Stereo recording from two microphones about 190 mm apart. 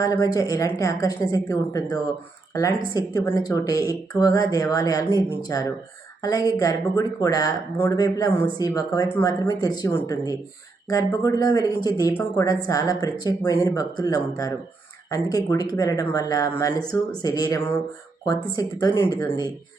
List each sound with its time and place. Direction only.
0.0 s speech: 20° left (ahead or behind)